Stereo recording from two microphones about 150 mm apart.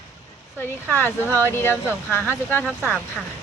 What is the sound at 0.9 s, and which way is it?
Speech, 15° left (ahead or behind).